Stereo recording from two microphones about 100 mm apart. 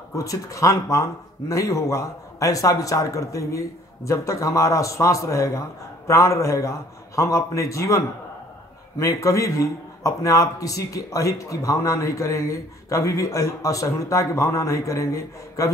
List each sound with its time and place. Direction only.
0.1 s speech: 35° left (ahead or behind)